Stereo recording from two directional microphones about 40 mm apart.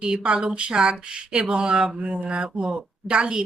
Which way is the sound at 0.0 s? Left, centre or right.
Right.